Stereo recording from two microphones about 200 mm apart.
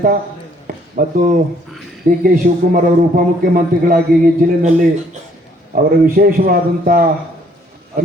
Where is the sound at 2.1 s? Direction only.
45° right (ahead or behind).